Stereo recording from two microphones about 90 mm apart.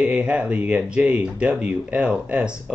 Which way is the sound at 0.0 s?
10° right (ahead or behind).